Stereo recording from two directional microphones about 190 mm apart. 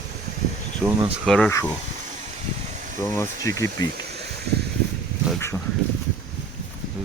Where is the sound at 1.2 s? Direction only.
5° left (ahead or behind).